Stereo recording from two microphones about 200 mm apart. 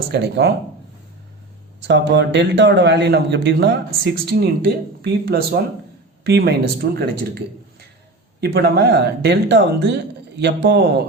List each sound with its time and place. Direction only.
0.1 s a man's voice: 55° right (ahead or behind)
1.9 s a man's voice: 60° right (ahead or behind)